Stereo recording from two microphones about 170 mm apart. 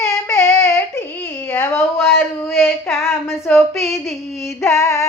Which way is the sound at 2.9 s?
15° left (ahead or behind).